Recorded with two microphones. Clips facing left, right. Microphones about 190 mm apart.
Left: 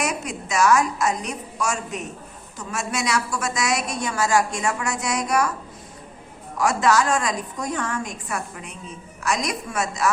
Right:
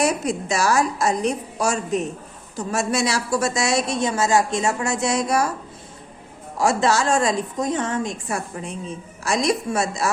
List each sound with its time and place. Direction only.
0.0 s a woman's voice: 30° right (ahead or behind)
6.6 s a woman's voice: 30° right (ahead or behind)